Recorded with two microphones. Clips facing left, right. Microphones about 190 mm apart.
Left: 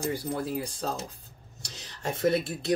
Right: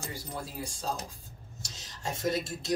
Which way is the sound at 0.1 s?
60° left (ahead or behind).